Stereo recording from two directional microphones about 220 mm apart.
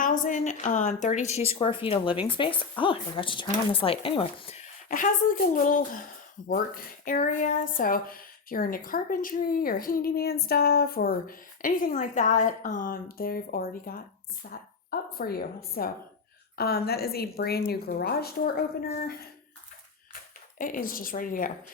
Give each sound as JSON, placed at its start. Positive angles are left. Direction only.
{"t": 0.0, "sound": "a woman's voice", "side_deg": 35}
{"t": 4.9, "sound": "a woman's voice", "side_deg": 40}
{"t": 20.6, "sound": "speech", "side_deg": 40}